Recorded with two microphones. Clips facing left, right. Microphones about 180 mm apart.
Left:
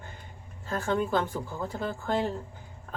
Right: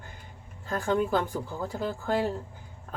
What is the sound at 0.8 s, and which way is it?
Speech, 10° right (ahead or behind).